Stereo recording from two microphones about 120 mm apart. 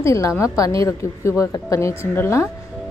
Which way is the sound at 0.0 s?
25° left (ahead or behind).